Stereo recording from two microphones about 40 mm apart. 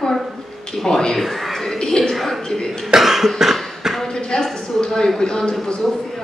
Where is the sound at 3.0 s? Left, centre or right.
Centre.